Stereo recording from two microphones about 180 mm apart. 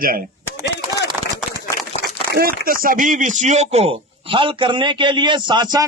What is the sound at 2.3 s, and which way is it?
Speech, 55° right (ahead or behind).